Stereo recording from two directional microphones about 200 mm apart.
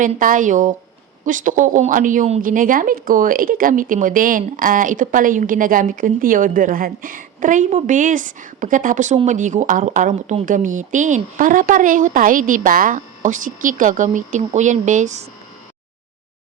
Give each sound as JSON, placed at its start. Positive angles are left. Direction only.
{"t": 0.0, "sound": "a woman's voice", "side_deg": -40}